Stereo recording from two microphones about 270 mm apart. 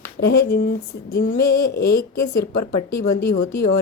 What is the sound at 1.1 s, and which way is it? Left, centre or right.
Speech, left.